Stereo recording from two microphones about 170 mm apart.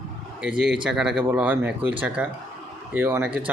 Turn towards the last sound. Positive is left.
turn(degrees=-10)  # may be behind; listen again after turning